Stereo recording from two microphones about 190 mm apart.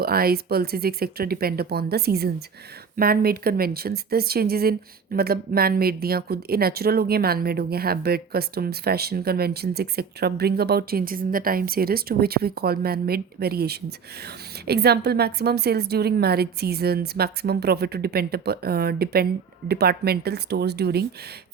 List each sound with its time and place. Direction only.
0.0 s a woman's voice: 55° right (ahead or behind)